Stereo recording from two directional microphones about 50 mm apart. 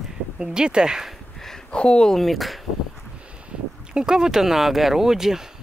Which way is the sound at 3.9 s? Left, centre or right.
Centre.